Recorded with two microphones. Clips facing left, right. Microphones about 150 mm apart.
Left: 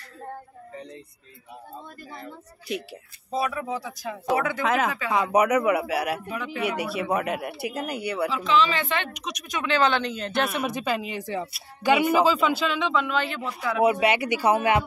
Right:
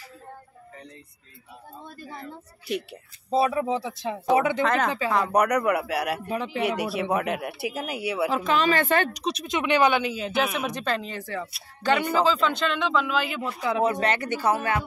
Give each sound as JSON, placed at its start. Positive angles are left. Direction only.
{"t": 2.7, "sound": "speech", "side_deg": 0}
{"t": 3.3, "sound": "speech", "side_deg": -30}
{"t": 4.6, "sound": "speech", "side_deg": 5}
{"t": 6.3, "sound": "speech", "side_deg": -30}
{"t": 6.6, "sound": "speech", "side_deg": 0}
{"t": 8.3, "sound": "speech", "side_deg": -50}
{"t": 13.6, "sound": "speech", "side_deg": -25}
{"t": 13.8, "sound": "speech", "side_deg": 10}